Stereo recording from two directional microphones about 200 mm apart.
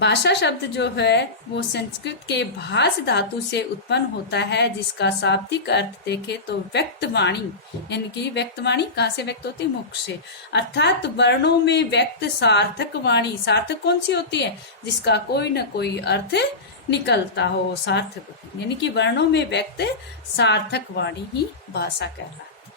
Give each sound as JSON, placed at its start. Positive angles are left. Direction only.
{"t": 0.0, "sound": "a woman's voice", "side_deg": 60}